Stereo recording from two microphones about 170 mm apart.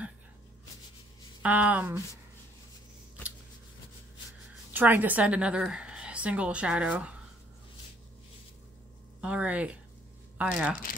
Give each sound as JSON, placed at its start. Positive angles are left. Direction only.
{"t": 1.4, "sound": "speech", "side_deg": -10}
{"t": 4.7, "sound": "a woman's voice", "side_deg": -10}
{"t": 9.2, "sound": "speech", "side_deg": -5}